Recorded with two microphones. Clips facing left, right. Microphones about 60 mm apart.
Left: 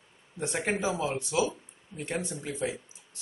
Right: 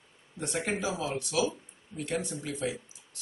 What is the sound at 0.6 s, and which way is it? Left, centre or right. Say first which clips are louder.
Speech: left 3 dB; left.